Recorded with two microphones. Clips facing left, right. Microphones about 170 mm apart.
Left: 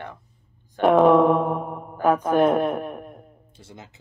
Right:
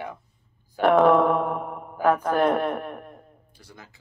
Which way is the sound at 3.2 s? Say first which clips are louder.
Left 3 dB; 25° left (ahead or behind).